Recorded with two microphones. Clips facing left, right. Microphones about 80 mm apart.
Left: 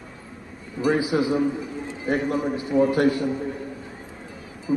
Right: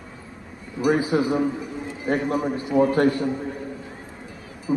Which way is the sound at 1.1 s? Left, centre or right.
Right.